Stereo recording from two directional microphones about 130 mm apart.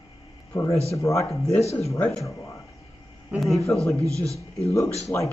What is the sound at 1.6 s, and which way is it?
Speech, 55° left (ahead or behind).